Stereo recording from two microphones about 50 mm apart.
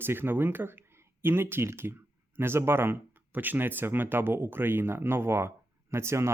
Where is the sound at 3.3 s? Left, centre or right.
Right.